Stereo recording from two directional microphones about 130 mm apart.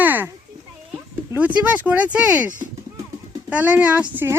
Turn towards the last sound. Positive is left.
turn(degrees=-15)  # may be behind; listen again after turning